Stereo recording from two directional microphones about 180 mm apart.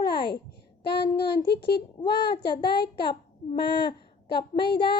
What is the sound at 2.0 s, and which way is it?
A child's voice, 25° left (ahead or behind).